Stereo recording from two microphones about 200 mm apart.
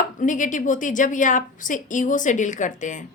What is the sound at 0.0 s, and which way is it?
A woman's voice, 40° left (ahead or behind).